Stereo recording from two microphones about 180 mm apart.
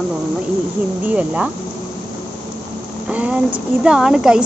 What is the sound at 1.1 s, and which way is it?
Speech, 5° right (ahead or behind).